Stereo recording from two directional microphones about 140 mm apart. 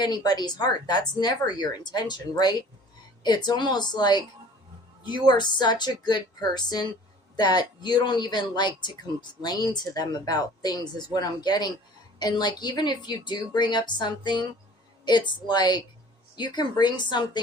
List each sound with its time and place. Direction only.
0.0 s a woman's voice: 30° left (ahead or behind)